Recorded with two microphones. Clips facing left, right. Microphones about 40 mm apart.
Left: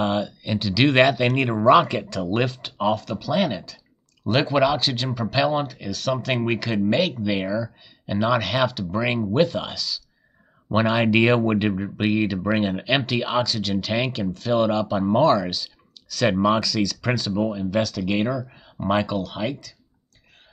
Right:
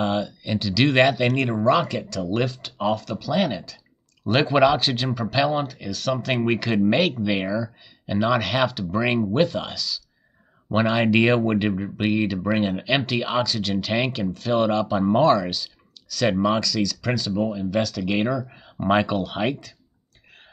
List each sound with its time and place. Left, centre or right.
0.0 s speech: centre
1.3 s speech: centre
2.2 s speech: centre